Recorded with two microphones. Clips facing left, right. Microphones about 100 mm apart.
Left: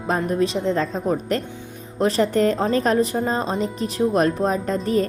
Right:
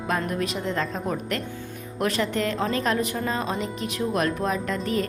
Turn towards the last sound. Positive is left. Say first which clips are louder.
# left 5 dB
turn(degrees=35)  # may be behind; listen again after turning